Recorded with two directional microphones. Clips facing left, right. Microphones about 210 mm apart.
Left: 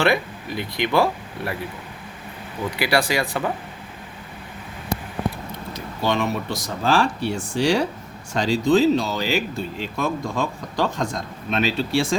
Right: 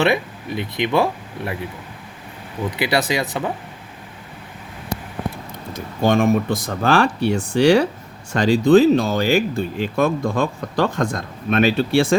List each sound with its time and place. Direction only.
0.0 s speech: 20° right (ahead or behind)
2.6 s speech: 20° right (ahead or behind)
5.7 s speech: 50° right (ahead or behind)